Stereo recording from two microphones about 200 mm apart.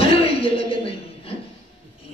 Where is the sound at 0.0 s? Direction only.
30° left (ahead or behind).